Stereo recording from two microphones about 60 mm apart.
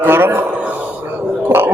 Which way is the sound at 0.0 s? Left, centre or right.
Right.